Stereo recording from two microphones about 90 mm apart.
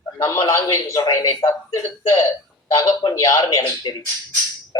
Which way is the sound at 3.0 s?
40° left (ahead or behind).